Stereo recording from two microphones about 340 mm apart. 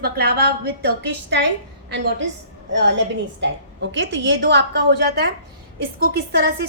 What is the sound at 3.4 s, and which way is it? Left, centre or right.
A woman's voice, right.